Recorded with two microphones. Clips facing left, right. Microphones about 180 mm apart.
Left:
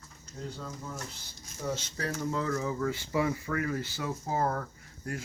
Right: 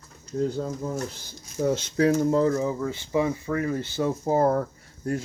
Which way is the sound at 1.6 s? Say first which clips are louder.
Right 12 dB; 70° right (ahead or behind).